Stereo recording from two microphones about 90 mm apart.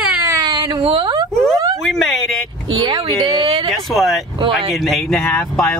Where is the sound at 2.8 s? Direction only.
60° right (ahead or behind); by 3.7 s 85° right.